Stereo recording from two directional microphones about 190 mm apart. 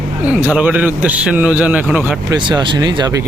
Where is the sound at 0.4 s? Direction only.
5° right (ahead or behind).